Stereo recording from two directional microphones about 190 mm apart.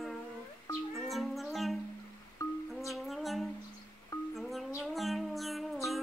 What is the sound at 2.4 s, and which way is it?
Music, 15° left (ahead or behind).